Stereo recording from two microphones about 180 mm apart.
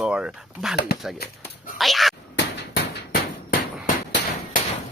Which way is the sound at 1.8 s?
Centre (ahead or behind).